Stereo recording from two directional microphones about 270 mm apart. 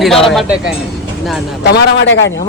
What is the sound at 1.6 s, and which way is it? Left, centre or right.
Speech, left.